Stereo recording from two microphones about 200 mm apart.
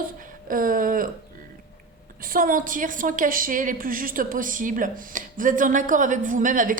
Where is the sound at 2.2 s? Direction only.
45° right (ahead or behind).